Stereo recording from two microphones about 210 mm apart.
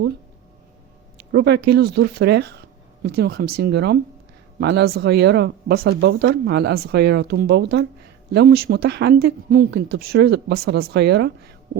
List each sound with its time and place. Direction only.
1.3 s speech: 55° right (ahead or behind)